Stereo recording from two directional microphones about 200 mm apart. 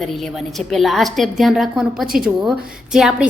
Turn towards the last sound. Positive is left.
turn(degrees=0)  # may be behind; listen again after turning